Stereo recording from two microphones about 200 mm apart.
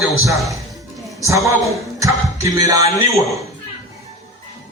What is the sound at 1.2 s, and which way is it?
Music, 15° right (ahead or behind).